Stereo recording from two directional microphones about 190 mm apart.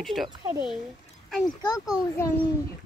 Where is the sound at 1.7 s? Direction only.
20° left (ahead or behind).